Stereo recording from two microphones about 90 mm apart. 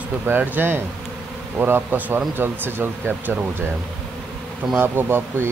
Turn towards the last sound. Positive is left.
turn(degrees=-25)  # may be behind; listen again after turning